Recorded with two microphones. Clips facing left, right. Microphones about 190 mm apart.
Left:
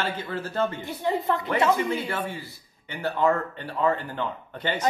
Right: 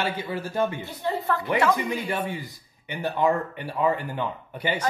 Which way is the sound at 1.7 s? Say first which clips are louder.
Left 1 dB; 15° right (ahead or behind).